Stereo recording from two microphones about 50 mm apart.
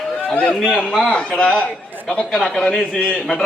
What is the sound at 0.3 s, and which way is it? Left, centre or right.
Speech, centre.